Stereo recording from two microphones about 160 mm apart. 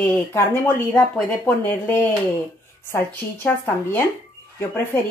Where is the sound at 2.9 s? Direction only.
15° left (ahead or behind).